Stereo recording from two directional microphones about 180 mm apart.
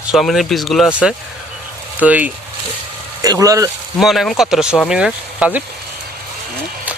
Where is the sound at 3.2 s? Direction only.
20° right (ahead or behind).